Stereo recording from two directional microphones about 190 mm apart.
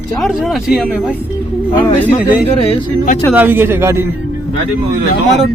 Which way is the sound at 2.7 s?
40° left (ahead or behind).